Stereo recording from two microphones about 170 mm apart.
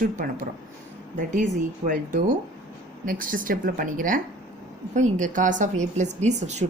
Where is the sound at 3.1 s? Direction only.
55° right (ahead or behind).